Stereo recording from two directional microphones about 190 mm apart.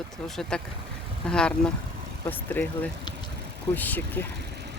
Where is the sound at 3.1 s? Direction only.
25° left (ahead or behind).